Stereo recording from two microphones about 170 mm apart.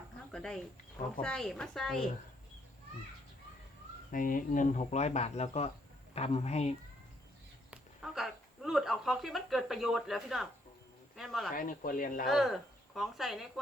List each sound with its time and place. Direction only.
0.3 s a woman's voice: 5° left (ahead or behind)
4.1 s speech: 55° left (ahead or behind)
7.7 s a woman's voice: centre (ahead or behind)
11.5 s speech: 55° left (ahead or behind)
12.3 s speech: centre (ahead or behind)